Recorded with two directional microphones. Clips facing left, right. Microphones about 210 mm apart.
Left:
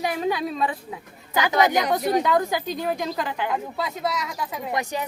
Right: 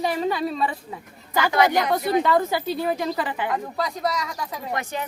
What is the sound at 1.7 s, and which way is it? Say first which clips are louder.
Speech: even; centre (ahead or behind).